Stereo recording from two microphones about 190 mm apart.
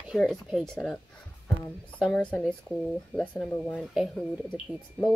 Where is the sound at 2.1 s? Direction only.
10° left (ahead or behind).